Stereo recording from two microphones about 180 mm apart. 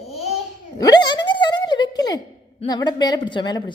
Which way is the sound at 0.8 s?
25° left (ahead or behind).